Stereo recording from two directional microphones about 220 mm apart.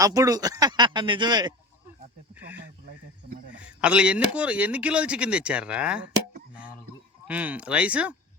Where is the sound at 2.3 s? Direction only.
10° right (ahead or behind).